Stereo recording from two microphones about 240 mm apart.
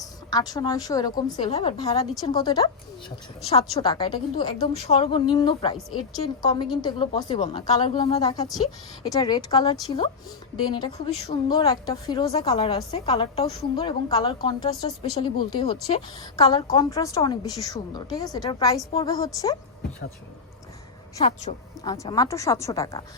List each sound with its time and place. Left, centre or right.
0.0 s a woman's voice: centre
7.3 s a woman's voice: left
21.2 s a woman's voice: left
21.8 s a woman's voice: centre